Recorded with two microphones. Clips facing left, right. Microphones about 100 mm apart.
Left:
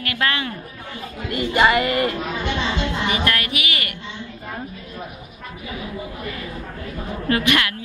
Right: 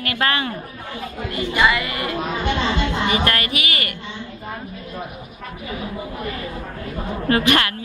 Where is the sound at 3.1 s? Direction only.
45° right (ahead or behind).